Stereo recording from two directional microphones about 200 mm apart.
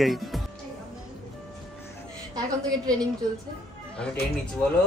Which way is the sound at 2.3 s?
20° right (ahead or behind).